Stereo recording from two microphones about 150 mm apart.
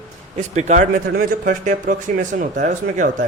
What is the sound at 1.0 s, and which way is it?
A man's voice, 80° right.